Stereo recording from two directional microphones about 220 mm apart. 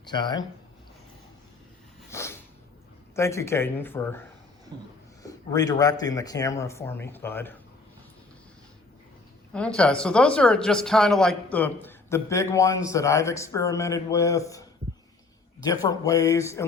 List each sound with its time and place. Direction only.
0.1 s speech: 20° left (ahead or behind)
2.0 s a sound: 10° left (ahead or behind)
3.2 s speech: 10° left (ahead or behind)
4.7 s a sound: 20° right (ahead or behind)
5.2 s speech: 15° left (ahead or behind)
9.5 s speech: 5° left (ahead or behind)
15.6 s speech: 15° left (ahead or behind)